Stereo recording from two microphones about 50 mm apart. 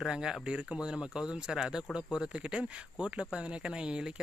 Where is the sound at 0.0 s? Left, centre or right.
Centre.